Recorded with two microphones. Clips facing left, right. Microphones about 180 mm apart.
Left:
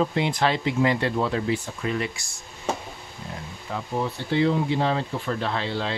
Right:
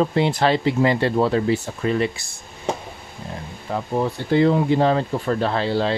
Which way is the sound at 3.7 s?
45° right (ahead or behind).